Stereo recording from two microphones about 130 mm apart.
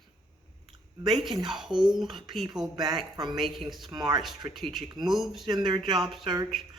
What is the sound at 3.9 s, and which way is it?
Speech, 35° right (ahead or behind).